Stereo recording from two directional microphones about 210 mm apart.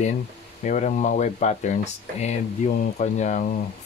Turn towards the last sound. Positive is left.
turn(degrees=35)  # may be behind; listen again after turning